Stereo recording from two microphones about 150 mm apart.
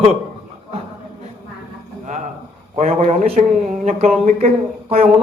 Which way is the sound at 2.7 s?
50° right (ahead or behind).